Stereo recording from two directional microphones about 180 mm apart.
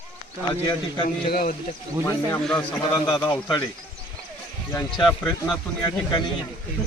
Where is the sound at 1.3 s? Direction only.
55° left (ahead or behind).